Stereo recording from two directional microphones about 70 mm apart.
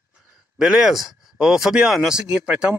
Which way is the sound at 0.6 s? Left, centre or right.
Centre.